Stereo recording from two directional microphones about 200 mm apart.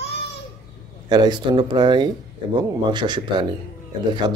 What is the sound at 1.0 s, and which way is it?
Speech, 20° right (ahead or behind).